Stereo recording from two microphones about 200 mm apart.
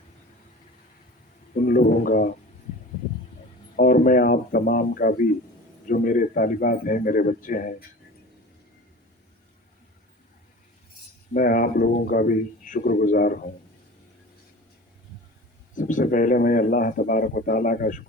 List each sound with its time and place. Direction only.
1.6 s a sound: 40° left (ahead or behind)
3.8 s speech: 45° left (ahead or behind)
11.3 s speech: 45° left (ahead or behind)
15.7 s speech: 40° left (ahead or behind)